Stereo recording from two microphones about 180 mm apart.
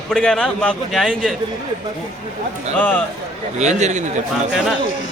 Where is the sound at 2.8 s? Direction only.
10° left (ahead or behind).